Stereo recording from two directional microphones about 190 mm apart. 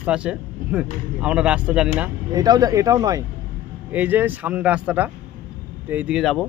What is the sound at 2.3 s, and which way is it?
Speech, 20° right (ahead or behind).